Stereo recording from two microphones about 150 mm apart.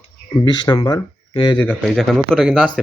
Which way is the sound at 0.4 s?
30° left (ahead or behind).